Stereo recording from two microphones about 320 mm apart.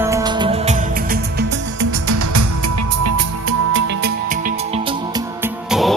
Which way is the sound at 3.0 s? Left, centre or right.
Right.